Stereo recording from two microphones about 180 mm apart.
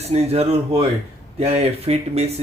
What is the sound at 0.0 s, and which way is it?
Speech, 35° right (ahead or behind).